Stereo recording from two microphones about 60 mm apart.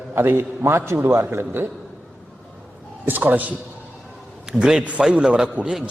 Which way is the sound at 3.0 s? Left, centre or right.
Right.